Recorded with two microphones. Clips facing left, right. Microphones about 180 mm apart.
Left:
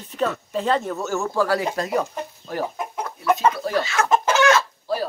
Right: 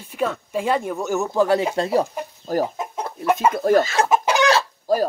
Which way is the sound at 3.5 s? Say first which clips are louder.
Right 7 dB; 50° right (ahead or behind).